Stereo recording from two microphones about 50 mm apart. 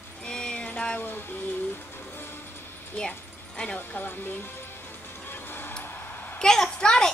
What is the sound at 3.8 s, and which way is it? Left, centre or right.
Speech, left.